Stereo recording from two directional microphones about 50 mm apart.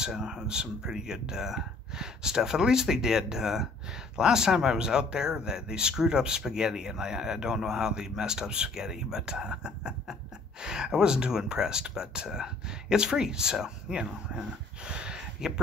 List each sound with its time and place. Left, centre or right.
0.0 s speech: centre